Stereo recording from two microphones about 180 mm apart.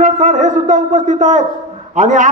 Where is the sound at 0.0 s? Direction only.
45° right (ahead or behind).